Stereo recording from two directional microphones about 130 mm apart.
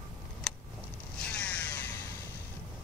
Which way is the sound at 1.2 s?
10° left (ahead or behind).